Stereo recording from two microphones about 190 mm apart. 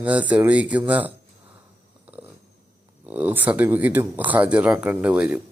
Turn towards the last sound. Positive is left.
turn(degrees=-5)  # may be behind; listen again after turning